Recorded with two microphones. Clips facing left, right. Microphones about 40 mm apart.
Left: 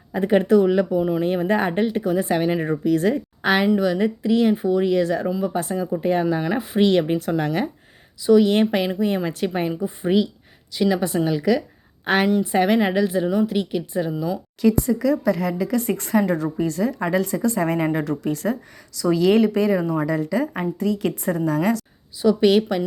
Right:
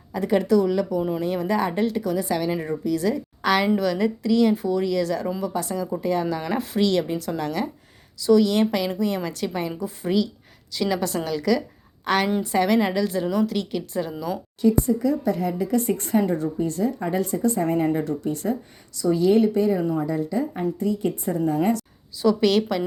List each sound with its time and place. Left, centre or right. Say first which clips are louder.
0.1 s a woman's voice: left 3 dB; left
3.8 s a woman's voice: left 2 dB; centre
6.4 s a woman's voice: left 2 dB; centre
6.7 s a woman's voice: left 5 dB; left
10.7 s a woman's voice: left 3 dB; centre
12.0 s a woman's voice: left 3 dB; left; by 14.1 s centre
14.6 s speech: left 1 dB; left
17.9 s speech: left 2 dB; left
18.9 s speech: left 2 dB; left
21.3 s speech: even; left
22.2 s a woman's voice: left 3 dB; centre